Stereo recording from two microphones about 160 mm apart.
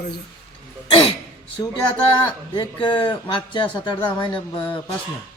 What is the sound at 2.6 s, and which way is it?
Speech, 30° left (ahead or behind).